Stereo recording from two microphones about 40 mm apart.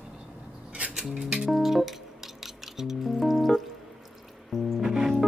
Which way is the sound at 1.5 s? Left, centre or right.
Centre.